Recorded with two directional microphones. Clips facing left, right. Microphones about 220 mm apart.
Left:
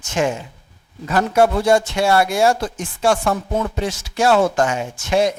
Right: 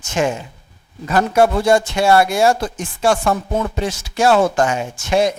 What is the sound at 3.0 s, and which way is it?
Chopping, 25° right (ahead or behind).